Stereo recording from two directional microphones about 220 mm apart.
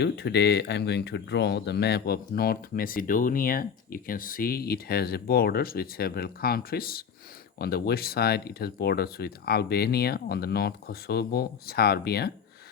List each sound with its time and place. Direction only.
0.0 s speech: 50° left (ahead or behind)